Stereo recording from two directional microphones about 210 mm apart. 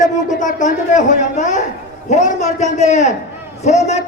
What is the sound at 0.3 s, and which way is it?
A man's voice, 35° left (ahead or behind).